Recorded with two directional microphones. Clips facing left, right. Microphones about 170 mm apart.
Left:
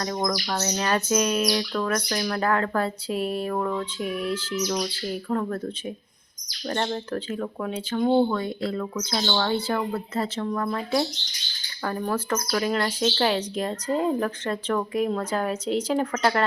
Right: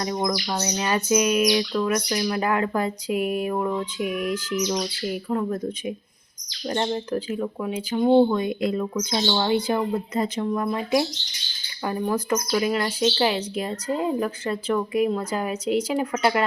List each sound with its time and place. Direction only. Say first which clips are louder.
0.0 s bird: right 1 dB; 10° right (ahead or behind)